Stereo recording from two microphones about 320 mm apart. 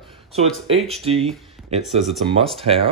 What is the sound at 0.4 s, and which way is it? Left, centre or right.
Speech, centre.